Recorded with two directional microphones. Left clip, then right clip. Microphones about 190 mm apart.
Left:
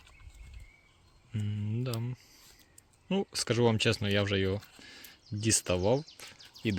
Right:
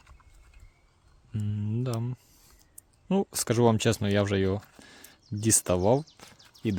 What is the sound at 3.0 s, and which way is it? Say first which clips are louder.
Speech: right 3 dB; 40° right (ahead or behind).